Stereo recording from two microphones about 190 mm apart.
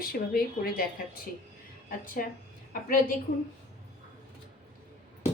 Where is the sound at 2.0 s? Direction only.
50° left (ahead or behind).